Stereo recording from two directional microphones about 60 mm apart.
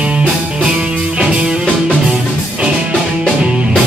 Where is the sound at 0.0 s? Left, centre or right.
Centre.